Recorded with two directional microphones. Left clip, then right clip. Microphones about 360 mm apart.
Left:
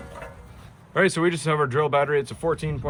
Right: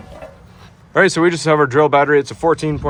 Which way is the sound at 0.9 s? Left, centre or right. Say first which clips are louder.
Right 8 dB; centre.